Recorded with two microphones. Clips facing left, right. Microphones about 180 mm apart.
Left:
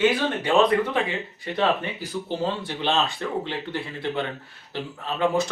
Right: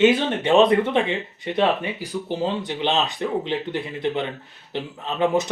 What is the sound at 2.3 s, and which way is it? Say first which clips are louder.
A man's voice: right 3 dB; 20° right (ahead or behind).